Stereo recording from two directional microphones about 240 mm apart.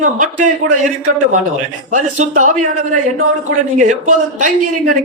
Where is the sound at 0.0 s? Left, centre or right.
Right.